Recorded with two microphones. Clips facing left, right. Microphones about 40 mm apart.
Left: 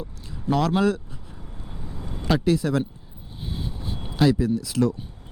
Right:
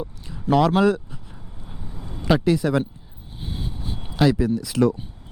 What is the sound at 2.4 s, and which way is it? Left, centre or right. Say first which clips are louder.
Speech: right 2 dB; centre.